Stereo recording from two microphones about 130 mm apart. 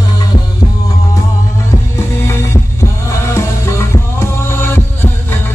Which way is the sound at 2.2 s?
20° left (ahead or behind).